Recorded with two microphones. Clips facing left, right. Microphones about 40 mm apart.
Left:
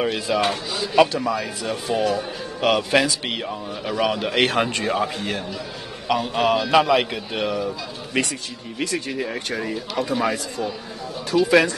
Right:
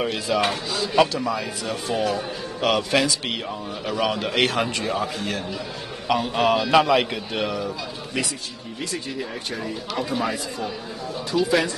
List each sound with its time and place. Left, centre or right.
0.0 s a man's voice: centre
4.5 s speech: left
4.9 s speech: centre
6.0 s a man's voice: centre
9.9 s a man's voice: centre